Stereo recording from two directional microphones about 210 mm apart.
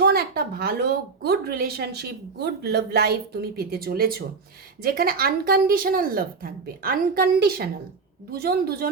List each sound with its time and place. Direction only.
0.0 s a woman's voice: 50° right (ahead or behind)